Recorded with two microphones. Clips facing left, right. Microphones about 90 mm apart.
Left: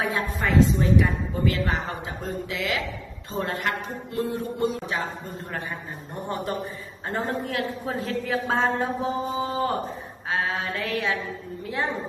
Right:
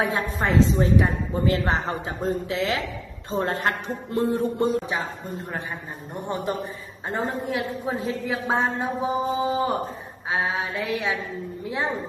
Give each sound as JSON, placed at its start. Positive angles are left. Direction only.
{"t": 0.0, "sound": "speech", "side_deg": -30}
{"t": 6.2, "sound": "a man's voice", "side_deg": -20}